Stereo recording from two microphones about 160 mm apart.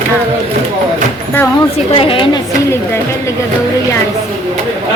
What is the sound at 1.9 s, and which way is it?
Speech, 35° left (ahead or behind).